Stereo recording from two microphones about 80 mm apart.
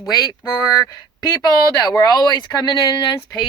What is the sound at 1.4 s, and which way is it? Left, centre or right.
Speech, left.